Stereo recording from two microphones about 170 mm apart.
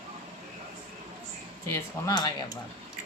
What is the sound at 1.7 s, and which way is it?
Speech, 25° left (ahead or behind).